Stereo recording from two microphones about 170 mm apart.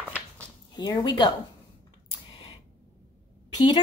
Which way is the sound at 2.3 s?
30° left (ahead or behind).